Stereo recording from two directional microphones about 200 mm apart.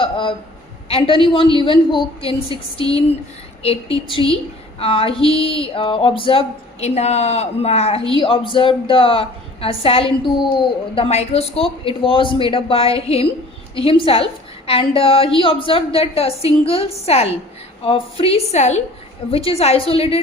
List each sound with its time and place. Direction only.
0.0 s a woman's voice: 25° left (ahead or behind)